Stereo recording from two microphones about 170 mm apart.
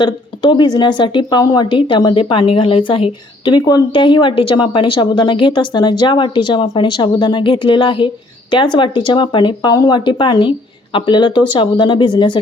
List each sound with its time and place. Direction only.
0.0 s a woman's voice: 25° left (ahead or behind)